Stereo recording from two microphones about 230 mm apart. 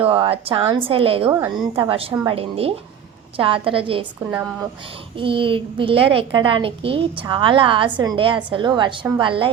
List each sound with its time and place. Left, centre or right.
0.0 s a child's voice: right
1.3 s a woman's voice: centre
1.7 s a child's voice: right
5.1 s a child's voice: right